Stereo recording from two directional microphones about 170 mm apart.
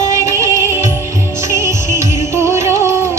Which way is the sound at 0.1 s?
20° right (ahead or behind).